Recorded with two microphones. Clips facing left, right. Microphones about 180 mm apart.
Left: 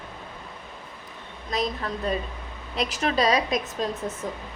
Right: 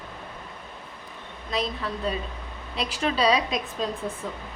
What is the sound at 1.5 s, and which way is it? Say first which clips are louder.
A woman's voice: left 1 dB; 45° left (ahead or behind).